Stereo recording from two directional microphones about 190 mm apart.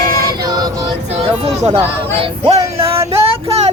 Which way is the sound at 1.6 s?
30° right (ahead or behind).